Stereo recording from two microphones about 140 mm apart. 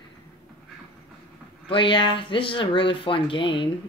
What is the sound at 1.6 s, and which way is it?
Speech, 40° left (ahead or behind).